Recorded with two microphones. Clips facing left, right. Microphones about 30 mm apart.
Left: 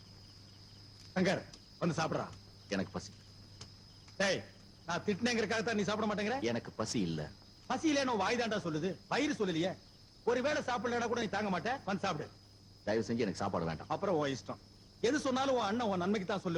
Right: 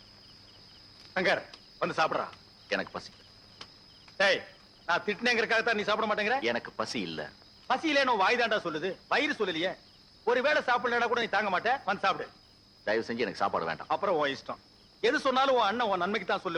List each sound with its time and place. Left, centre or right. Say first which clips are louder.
1.1 s speech: right 5 dB; right
4.2 s a man's voice: right 7 dB; right